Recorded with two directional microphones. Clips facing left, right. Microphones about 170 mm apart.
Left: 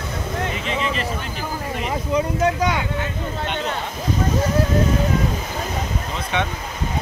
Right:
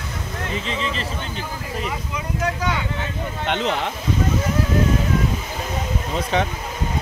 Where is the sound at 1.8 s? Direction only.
35° left (ahead or behind).